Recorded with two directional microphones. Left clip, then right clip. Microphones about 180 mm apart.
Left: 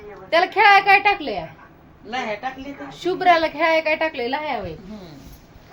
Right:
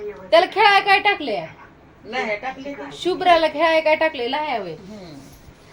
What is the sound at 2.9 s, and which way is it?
A woman's voice, 20° right (ahead or behind).